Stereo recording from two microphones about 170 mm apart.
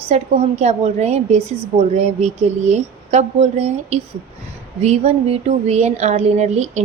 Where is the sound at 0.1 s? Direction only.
40° right (ahead or behind).